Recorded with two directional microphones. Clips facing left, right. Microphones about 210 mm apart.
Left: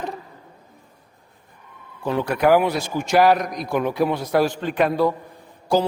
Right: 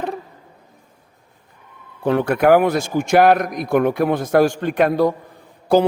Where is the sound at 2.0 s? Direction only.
60° right (ahead or behind).